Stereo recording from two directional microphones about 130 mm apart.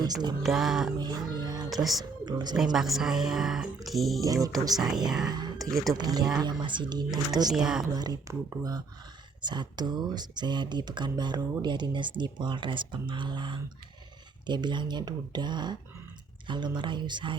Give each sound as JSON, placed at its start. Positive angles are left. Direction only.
{"t": 0.0, "sound": "speech", "side_deg": -30}
{"t": 0.4, "sound": "speech", "side_deg": 0}
{"t": 0.9, "sound": "music", "side_deg": -30}
{"t": 1.7, "sound": "speech", "side_deg": 0}
{"t": 2.2, "sound": "speech", "side_deg": -35}
{"t": 2.7, "sound": "speech", "side_deg": 0}
{"t": 4.6, "sound": "speech", "side_deg": -30}
{"t": 5.0, "sound": "speech", "side_deg": -5}
{"t": 5.3, "sound": "a sound", "side_deg": -35}
{"t": 5.9, "sound": "speech", "side_deg": -30}
{"t": 7.5, "sound": "speech", "side_deg": -5}
{"t": 7.9, "sound": "speech", "side_deg": -30}